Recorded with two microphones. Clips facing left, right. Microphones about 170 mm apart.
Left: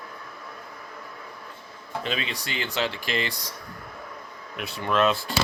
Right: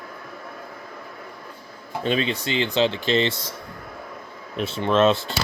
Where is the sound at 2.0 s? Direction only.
30° right (ahead or behind).